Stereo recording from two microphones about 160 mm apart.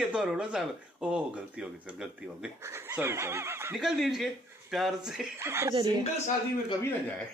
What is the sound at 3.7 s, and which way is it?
Speech, centre (ahead or behind).